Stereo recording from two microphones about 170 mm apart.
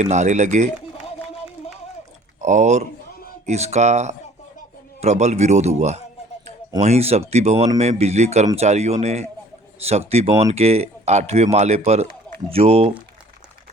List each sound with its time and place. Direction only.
0.0 s speech: 45° right (ahead or behind)
2.4 s speech: 45° right (ahead or behind)